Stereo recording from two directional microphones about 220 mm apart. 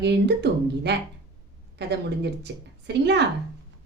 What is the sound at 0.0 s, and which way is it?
Speech, 50° right (ahead or behind).